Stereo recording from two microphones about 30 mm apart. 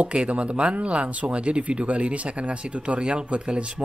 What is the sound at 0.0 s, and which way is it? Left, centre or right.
Speech, right.